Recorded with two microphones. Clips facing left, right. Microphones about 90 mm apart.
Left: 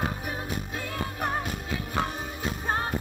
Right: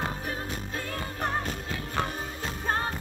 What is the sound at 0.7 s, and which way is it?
Music, 10° left (ahead or behind).